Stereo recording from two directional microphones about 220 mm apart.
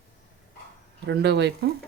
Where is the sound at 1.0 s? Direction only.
50° right (ahead or behind).